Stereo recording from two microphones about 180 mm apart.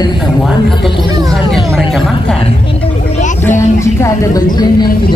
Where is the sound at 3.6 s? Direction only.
15° left (ahead or behind).